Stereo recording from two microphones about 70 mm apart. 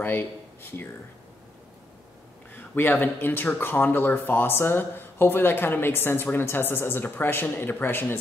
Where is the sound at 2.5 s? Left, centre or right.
Left.